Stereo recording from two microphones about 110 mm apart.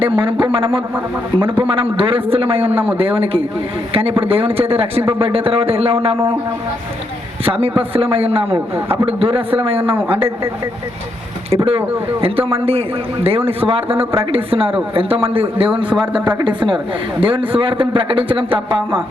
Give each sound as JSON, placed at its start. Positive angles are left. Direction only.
{"t": 0.0, "sound": "a man's voice", "side_deg": -55}
{"t": 7.4, "sound": "a man's voice", "side_deg": -60}
{"t": 11.5, "sound": "a man's voice", "side_deg": -65}